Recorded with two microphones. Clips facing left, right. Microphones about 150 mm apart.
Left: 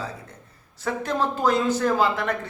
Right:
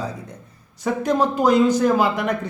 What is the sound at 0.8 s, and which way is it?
A man's voice, 15° right (ahead or behind).